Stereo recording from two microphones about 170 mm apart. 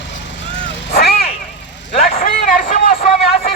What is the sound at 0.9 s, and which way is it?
Vehicle, 65° left (ahead or behind).